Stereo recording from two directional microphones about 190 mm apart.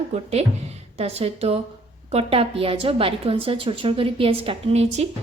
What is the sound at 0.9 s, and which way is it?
A woman's voice, 30° right (ahead or behind).